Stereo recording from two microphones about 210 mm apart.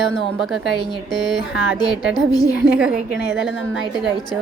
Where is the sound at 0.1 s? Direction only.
Centre (ahead or behind).